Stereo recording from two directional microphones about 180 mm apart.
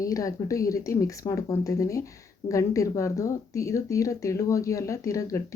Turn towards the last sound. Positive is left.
turn(degrees=20)  # may be behind; listen again after turning